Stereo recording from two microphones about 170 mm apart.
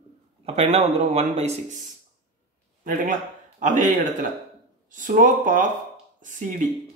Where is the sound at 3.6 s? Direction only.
50° right (ahead or behind).